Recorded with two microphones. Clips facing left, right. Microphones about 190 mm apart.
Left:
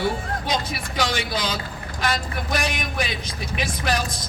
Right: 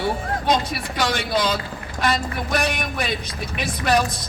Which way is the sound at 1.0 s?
60° right (ahead or behind).